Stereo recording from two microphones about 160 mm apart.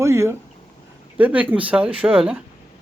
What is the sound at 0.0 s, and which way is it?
Speech, 15° right (ahead or behind).